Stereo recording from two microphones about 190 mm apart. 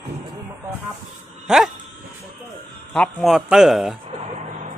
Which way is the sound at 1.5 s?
5° right (ahead or behind).